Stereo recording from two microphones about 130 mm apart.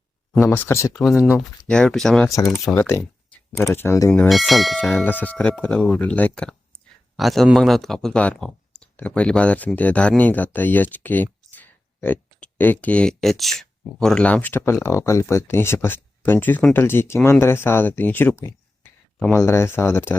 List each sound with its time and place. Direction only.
0.4 s speech: 20° left (ahead or behind)
0.9 s speech: centre (ahead or behind)
2.2 s speech: 20° left (ahead or behind)
4.3 s speech: centre (ahead or behind)
5.0 s speech: 15° left (ahead or behind)